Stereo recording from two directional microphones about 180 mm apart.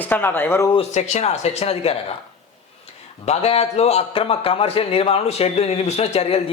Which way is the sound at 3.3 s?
35° left (ahead or behind).